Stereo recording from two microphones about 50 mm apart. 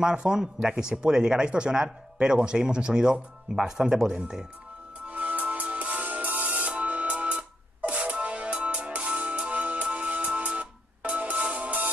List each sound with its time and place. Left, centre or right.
0.0 s speech: centre
5.0 s music: right